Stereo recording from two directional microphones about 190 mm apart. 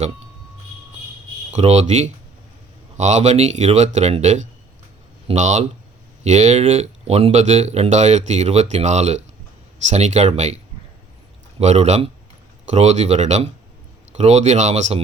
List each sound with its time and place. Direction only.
1.5 s speech: 35° right (ahead or behind)
11.6 s speech: 35° right (ahead or behind)